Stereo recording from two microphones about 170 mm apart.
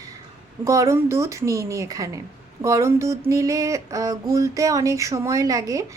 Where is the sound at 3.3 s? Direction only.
20° right (ahead or behind).